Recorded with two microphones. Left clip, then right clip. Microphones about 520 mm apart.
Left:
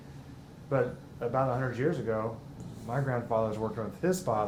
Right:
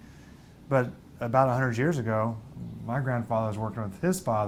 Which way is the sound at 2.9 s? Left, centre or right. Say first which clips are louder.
Right 1 dB; right.